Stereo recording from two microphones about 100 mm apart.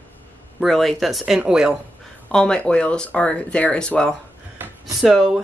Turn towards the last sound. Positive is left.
turn(degrees=0)  # may be behind; listen again after turning